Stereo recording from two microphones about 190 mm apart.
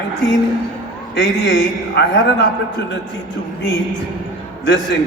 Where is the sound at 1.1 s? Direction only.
65° left (ahead or behind).